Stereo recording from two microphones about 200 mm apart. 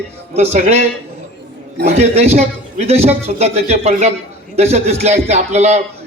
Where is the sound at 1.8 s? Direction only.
35° right (ahead or behind).